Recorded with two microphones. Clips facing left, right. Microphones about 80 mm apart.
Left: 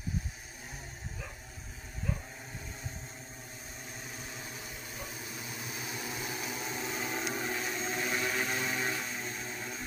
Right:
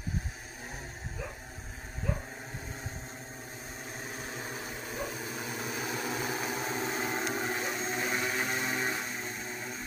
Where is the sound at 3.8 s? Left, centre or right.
Right.